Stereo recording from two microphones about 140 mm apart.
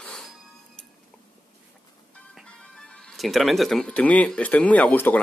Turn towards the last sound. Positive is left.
turn(degrees=10)  # may be behind; listen again after turning